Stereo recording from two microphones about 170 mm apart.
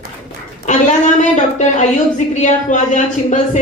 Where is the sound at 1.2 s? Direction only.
45° left (ahead or behind).